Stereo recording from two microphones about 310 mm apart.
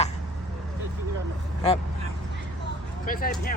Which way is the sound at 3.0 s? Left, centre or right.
Left.